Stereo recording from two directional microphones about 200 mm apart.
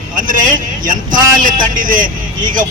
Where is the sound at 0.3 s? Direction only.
40° right (ahead or behind).